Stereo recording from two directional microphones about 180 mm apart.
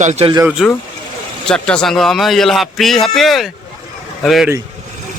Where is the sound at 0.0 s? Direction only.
40° right (ahead or behind).